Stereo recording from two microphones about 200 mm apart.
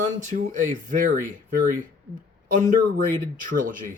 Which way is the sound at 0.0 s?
40° right (ahead or behind).